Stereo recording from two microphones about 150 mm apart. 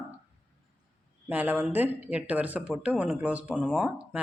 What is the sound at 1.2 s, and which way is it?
Speech, 10° right (ahead or behind).